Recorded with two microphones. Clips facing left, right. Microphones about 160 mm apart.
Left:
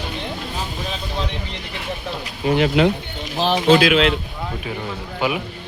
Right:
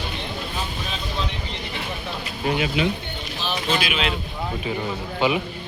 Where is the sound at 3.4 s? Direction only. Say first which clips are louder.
Left 11 dB; 90° left.